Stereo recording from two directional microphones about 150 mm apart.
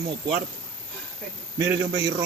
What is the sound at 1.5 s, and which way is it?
Speech, 20° right (ahead or behind).